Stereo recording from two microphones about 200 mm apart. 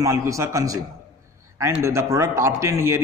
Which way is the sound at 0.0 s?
15° right (ahead or behind).